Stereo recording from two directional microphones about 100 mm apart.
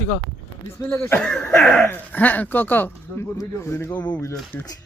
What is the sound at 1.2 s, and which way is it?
Speech, 10° left (ahead or behind).